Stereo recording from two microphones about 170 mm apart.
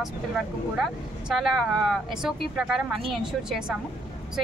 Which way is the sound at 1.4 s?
Centre (ahead or behind).